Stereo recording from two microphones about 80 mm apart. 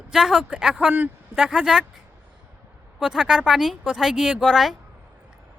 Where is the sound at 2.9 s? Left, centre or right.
Centre.